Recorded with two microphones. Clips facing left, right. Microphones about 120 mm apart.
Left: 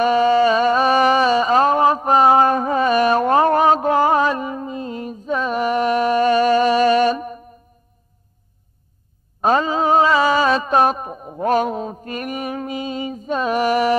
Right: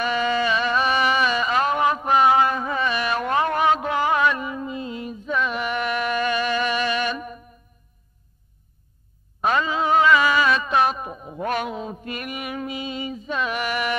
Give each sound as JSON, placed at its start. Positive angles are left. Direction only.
{"t": 0.0, "sound": "music", "side_deg": 35}
{"t": 9.4, "sound": "mantra", "side_deg": 40}